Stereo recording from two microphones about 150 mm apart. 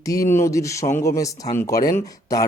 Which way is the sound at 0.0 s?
20° left (ahead or behind).